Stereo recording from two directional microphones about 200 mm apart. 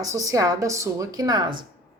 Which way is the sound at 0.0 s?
15° right (ahead or behind).